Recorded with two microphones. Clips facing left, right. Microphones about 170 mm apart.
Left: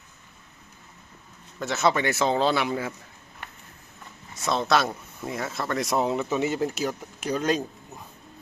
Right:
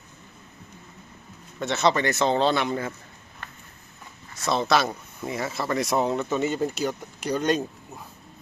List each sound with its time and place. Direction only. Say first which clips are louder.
1.5 s speech: right 1 dB; 5° left (ahead or behind)
4.4 s speech: right 1 dB; centre (ahead or behind)